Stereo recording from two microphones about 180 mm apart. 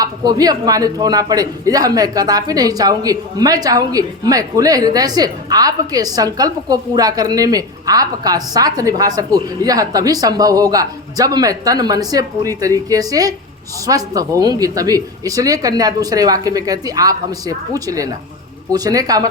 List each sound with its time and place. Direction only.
0.0 s a man's voice: 20° right (ahead or behind)